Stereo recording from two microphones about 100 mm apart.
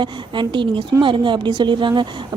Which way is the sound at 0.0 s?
55° right (ahead or behind).